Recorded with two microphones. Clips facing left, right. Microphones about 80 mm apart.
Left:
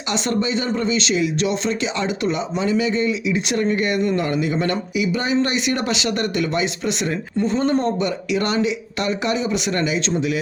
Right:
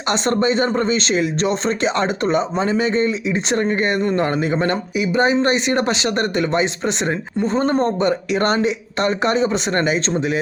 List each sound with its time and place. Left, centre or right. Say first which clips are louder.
0.1 s speech: right 4 dB; right